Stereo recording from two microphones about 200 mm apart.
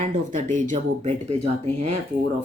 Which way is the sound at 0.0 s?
40° right (ahead or behind).